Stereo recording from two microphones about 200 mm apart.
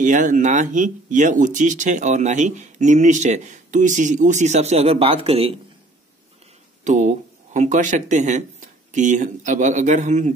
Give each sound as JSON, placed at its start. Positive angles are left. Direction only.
{"t": 0.0, "sound": "speech", "side_deg": -40}
{"t": 6.8, "sound": "speech", "side_deg": -35}